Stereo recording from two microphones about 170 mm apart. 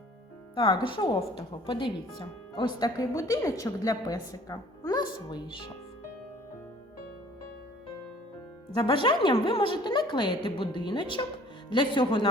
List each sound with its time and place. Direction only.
0.5 s a woman's voice: 30° left (ahead or behind)
8.7 s a woman's voice: 30° left (ahead or behind)